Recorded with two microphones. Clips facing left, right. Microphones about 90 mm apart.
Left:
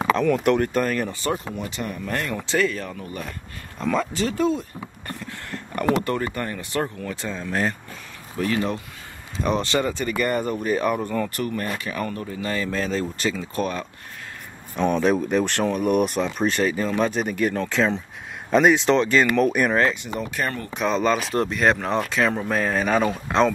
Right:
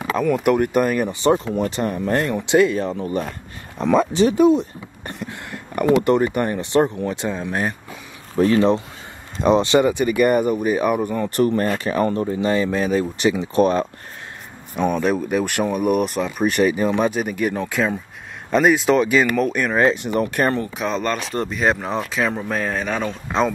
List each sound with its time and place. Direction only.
0.1 s speech: 5° right (ahead or behind)
1.5 s speech: 40° right (ahead or behind)
2.4 s speech: 20° right (ahead or behind)
3.7 s a sound: 20° right (ahead or behind)
6.0 s speech: 20° right (ahead or behind)
11.2 s speech: 30° right (ahead or behind)
14.8 s speech: 5° right (ahead or behind)
20.0 s speech: 55° right (ahead or behind)
20.7 s speech: centre (ahead or behind)